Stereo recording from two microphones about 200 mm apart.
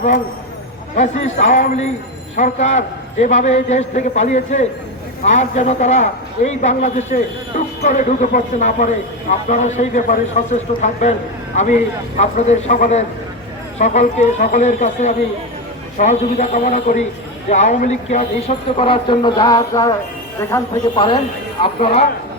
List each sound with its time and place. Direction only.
0.9 s a man's voice: 35° left (ahead or behind)